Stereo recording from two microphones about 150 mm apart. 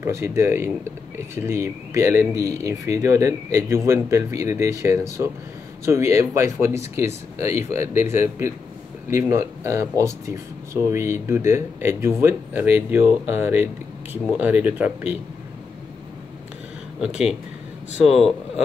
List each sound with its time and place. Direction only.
0.0 s speech: 20° right (ahead or behind)
17.0 s speech: 5° right (ahead or behind)